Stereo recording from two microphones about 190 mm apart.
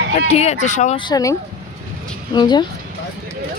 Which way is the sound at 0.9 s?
20° left (ahead or behind).